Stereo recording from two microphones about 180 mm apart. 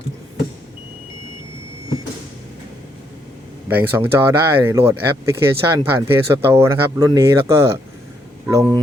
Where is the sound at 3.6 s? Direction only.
10° right (ahead or behind).